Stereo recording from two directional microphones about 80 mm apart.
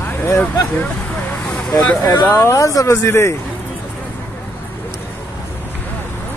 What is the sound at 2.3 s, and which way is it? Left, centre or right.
Speech, left.